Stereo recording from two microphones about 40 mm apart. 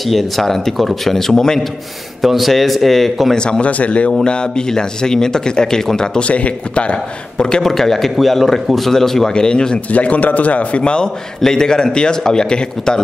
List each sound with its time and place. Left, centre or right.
0.0 s a man's voice: centre
2.2 s a man's voice: centre
3.3 s a man's voice: left
3.7 s a man's voice: left
4.2 s speech: left
6.1 s a man's voice: left
7.6 s speech: centre
9.3 s a man's voice: left
9.8 s a man's voice: left
10.8 s a man's voice: left